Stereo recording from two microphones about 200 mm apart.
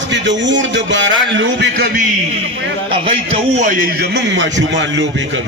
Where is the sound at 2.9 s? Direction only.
30° right (ahead or behind).